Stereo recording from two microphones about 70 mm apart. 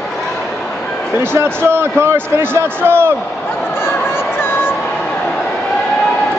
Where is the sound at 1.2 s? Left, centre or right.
Right.